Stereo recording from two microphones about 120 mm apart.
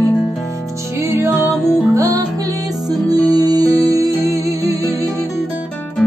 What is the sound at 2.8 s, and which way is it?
Music, 30° right (ahead or behind).